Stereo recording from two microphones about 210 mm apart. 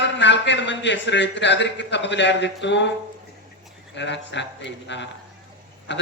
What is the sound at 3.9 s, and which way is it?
A man's voice, 55° left (ahead or behind).